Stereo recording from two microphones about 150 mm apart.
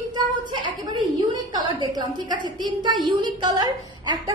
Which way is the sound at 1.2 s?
30° right (ahead or behind).